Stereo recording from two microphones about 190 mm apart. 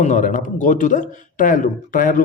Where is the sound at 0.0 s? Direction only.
40° left (ahead or behind).